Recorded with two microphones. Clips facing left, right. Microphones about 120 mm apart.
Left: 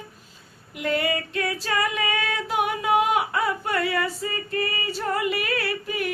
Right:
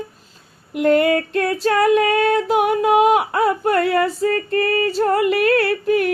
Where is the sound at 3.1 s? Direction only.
70° right (ahead or behind).